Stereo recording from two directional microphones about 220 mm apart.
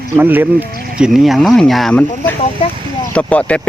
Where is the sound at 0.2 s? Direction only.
10° right (ahead or behind).